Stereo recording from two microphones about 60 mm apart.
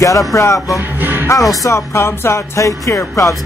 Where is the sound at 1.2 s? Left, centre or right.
Left.